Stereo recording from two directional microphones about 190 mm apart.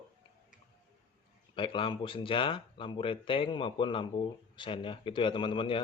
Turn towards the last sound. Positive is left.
turn(degrees=25)  # may be behind; listen again after turning